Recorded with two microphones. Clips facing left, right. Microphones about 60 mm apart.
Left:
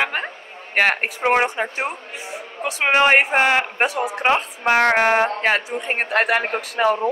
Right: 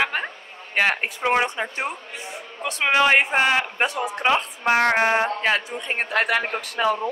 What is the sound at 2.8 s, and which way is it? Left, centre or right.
Speech, left.